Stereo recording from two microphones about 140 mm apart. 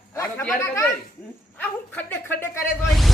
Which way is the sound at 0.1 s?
20° left (ahead or behind).